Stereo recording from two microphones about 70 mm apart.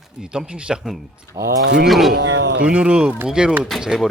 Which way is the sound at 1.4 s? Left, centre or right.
Right.